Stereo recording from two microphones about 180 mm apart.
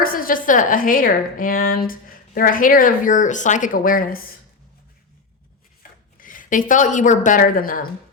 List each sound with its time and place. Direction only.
0.0 s speech: 50° left (ahead or behind)
6.1 s speech: 50° left (ahead or behind)